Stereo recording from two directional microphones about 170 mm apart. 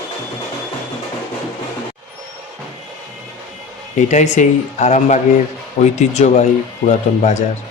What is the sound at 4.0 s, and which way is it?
Speech, 45° left (ahead or behind).